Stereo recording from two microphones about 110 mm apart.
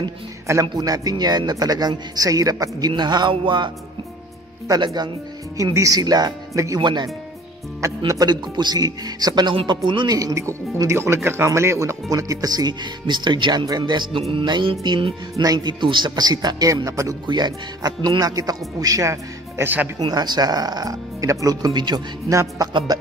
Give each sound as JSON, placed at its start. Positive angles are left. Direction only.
{"t": 0.5, "sound": "speech", "side_deg": -30}
{"t": 2.9, "sound": "music", "side_deg": -40}
{"t": 4.6, "sound": "speech", "side_deg": -40}
{"t": 5.6, "sound": "speech", "side_deg": -30}
{"t": 6.8, "sound": "music", "side_deg": -40}
{"t": 8.1, "sound": "speech", "side_deg": -40}
{"t": 9.8, "sound": "music", "side_deg": -45}
{"t": 10.1, "sound": "speech", "side_deg": -30}
{"t": 14.3, "sound": "music", "side_deg": -45}
{"t": 15.3, "sound": "speech", "side_deg": -35}
{"t": 20.0, "sound": "speech", "side_deg": -40}
{"t": 22.3, "sound": "speech", "side_deg": -25}
{"t": 22.7, "sound": "music", "side_deg": -40}